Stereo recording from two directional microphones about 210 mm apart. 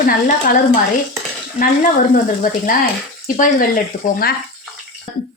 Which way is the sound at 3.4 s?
40° left (ahead or behind).